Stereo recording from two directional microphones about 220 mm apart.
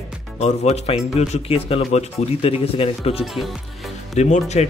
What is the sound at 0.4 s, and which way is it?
Speech, 30° left (ahead or behind).